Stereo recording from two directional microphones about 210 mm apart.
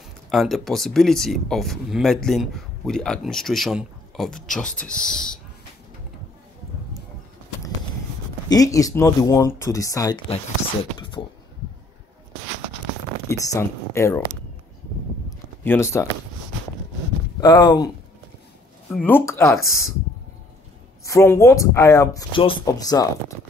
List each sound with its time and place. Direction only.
0.3 s speech: centre (ahead or behind)
8.5 s speech: 15° left (ahead or behind)
11.0 s a sound: 20° left (ahead or behind)
13.3 s speech: 15° left (ahead or behind)
15.2 s a sound: 10° left (ahead or behind)
17.4 s speech: 20° left (ahead or behind)
18.9 s speech: 10° left (ahead or behind)
21.0 s speech: 15° left (ahead or behind)